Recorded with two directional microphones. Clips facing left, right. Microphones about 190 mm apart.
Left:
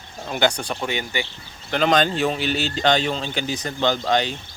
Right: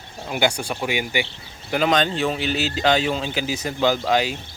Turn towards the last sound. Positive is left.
turn(degrees=-5)  # may be behind; listen again after turning